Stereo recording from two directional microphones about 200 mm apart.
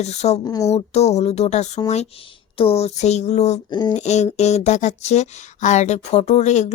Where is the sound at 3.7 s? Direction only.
20° left (ahead or behind).